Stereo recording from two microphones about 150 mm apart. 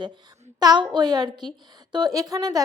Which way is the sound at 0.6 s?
30° right (ahead or behind).